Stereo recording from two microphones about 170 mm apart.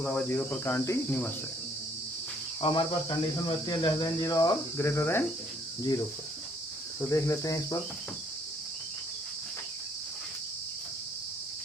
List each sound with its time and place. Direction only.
0.0 s cricket: 5° left (ahead or behind)
2.6 s speech: 30° left (ahead or behind)
7.1 s speech: 20° left (ahead or behind)